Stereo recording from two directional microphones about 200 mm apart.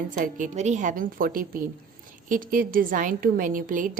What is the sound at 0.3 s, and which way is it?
A woman's voice, 40° right (ahead or behind).